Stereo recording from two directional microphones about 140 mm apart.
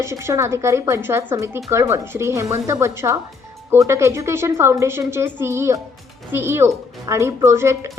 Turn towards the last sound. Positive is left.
turn(degrees=-20)  # may be behind; listen again after turning